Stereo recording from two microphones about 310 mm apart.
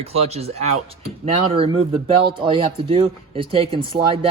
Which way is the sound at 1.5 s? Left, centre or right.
Centre.